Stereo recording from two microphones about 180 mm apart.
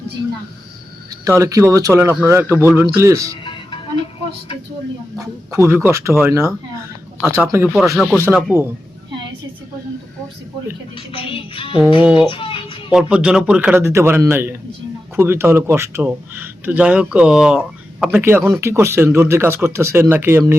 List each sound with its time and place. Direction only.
1.2 s a man's voice: 15° right (ahead or behind)
5.1 s a man's voice: 15° right (ahead or behind)
7.9 s speech: 5° left (ahead or behind)
8.4 s a man's voice: 15° right (ahead or behind)
10.9 s music: 30° left (ahead or behind)
12.3 s a sound: 30° left (ahead or behind)
12.9 s a man's voice: 5° right (ahead or behind)